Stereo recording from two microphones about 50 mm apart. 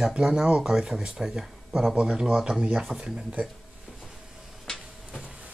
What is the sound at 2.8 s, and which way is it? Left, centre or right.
Speech, centre.